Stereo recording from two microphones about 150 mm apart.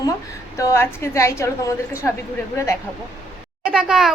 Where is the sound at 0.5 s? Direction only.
20° left (ahead or behind).